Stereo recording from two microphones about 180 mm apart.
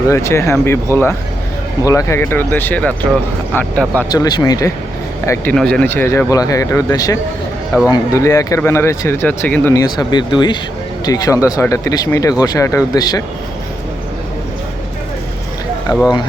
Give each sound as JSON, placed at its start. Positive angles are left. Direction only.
{"t": 0.1, "sound": "speech", "side_deg": 15}
{"t": 4.1, "sound": "speech", "side_deg": 20}
{"t": 5.5, "sound": "speech", "side_deg": 5}
{"t": 15.9, "sound": "speech", "side_deg": 20}